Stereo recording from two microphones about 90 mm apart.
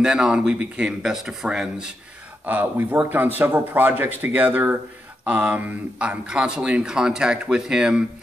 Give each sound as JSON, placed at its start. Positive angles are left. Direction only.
{"t": 0.0, "sound": "speech", "side_deg": -10}
{"t": 2.4, "sound": "speech", "side_deg": -20}